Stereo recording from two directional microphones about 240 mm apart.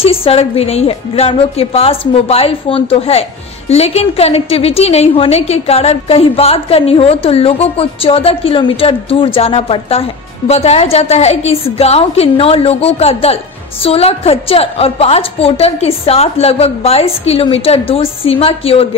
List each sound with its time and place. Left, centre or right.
0.0 s a woman's voice: left